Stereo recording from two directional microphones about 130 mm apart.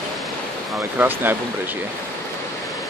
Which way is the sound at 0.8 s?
15° right (ahead or behind).